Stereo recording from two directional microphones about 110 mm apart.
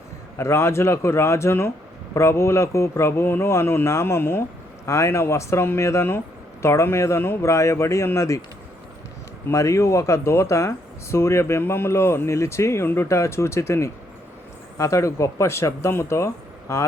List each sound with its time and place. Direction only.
0.3 s speech: 25° left (ahead or behind)
9.5 s speech: 30° left (ahead or behind)